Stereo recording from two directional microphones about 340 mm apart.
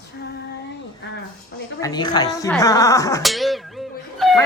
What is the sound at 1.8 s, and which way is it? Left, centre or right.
Speech, centre.